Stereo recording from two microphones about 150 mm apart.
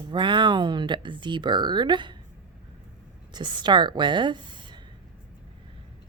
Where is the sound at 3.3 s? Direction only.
30° right (ahead or behind).